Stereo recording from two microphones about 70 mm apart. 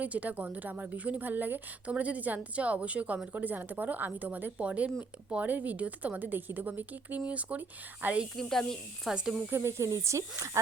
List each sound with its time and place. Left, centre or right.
0.0 s a woman's voice: right
8.4 s speech: centre
9.0 s speech: centre
9.5 s speech: right